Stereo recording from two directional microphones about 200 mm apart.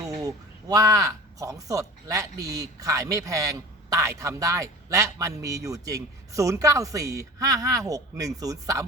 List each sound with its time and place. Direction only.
0.2 s speech: 20° right (ahead or behind)